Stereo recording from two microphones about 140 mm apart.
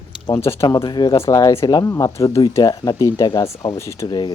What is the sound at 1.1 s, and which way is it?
Speech, 20° left (ahead or behind).